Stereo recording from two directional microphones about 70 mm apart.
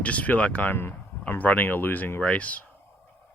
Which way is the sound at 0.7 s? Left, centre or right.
Left.